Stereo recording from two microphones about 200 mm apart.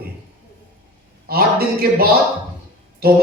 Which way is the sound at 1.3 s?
50° right (ahead or behind).